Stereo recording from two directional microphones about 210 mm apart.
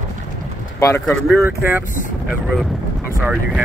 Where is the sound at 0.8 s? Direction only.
15° left (ahead or behind).